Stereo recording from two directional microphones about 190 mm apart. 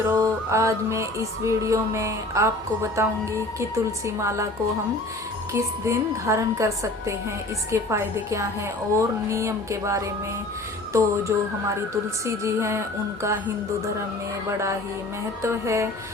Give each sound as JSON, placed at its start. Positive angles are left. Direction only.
{"t": 0.1, "sound": "mantra", "side_deg": -15}
{"t": 1.5, "sound": "a woman's voice", "side_deg": -15}
{"t": 5.5, "sound": "a woman's voice", "side_deg": -15}
{"t": 15.4, "sound": "a woman's voice", "side_deg": -15}